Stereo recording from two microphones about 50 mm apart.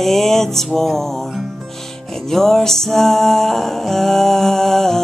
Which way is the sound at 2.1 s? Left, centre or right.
Centre.